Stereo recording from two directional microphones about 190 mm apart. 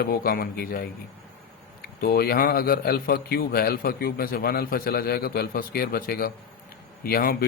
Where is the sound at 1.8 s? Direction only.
55° left (ahead or behind).